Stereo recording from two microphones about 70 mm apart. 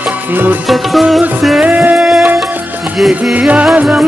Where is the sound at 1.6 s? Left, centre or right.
Right.